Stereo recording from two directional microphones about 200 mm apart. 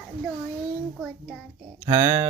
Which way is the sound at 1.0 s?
Centre (ahead or behind).